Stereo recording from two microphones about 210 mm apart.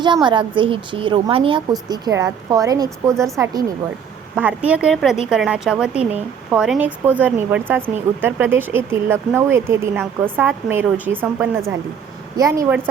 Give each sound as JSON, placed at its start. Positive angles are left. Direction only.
{"t": 0.0, "sound": "a woman's voice", "side_deg": -20}